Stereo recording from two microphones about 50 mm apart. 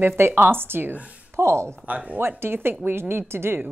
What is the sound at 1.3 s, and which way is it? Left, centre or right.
Speech, right.